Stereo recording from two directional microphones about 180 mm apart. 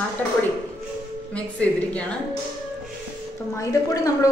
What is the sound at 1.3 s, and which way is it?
Speech, 5° left (ahead or behind).